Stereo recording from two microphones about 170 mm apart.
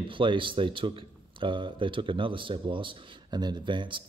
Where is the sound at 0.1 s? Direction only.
30° right (ahead or behind).